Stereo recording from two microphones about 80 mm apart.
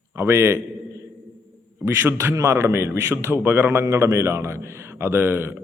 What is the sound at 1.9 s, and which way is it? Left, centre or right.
A man's voice, right.